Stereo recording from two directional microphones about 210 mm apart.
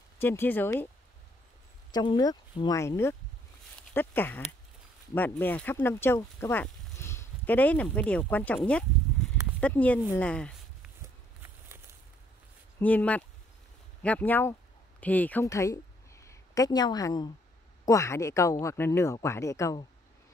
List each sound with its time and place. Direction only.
0.2 s speech: 10° left (ahead or behind)
1.9 s speech: 20° left (ahead or behind)
9.6 s speech: 5° left (ahead or behind)
12.7 s speech: 10° left (ahead or behind)